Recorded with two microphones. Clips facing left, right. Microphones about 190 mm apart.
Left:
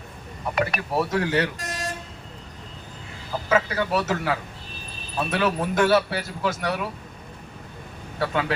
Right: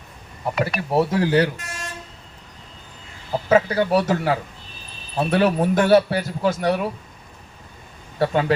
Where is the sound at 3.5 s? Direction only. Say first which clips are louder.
Right 5 dB; 35° right (ahead or behind).